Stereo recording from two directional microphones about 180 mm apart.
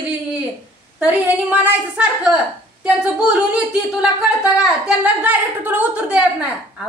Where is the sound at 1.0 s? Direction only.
5° right (ahead or behind).